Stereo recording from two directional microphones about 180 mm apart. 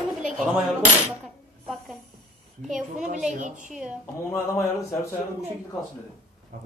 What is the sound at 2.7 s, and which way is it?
Speech, 45° right (ahead or behind).